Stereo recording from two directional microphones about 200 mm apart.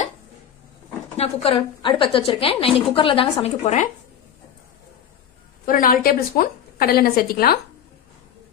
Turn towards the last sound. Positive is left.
turn(degrees=50)  # may be behind; listen again after turning